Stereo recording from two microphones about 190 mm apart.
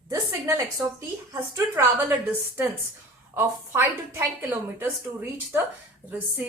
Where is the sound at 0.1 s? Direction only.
15° right (ahead or behind).